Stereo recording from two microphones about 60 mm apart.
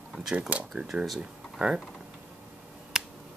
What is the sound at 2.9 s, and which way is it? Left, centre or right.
Finger snapping, centre.